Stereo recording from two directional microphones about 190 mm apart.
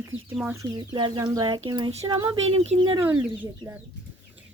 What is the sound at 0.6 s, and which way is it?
Speech, 25° right (ahead or behind).